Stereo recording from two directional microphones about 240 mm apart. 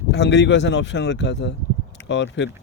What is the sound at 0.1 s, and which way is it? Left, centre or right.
Speech, left.